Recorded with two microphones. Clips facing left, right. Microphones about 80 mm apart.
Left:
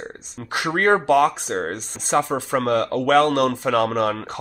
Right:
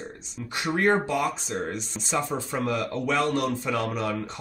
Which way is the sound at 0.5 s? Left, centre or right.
Left.